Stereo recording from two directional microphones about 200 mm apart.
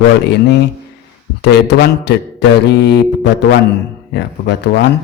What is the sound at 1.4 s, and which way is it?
A man's voice, 55° left (ahead or behind).